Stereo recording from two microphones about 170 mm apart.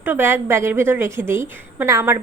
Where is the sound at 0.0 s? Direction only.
10° right (ahead or behind).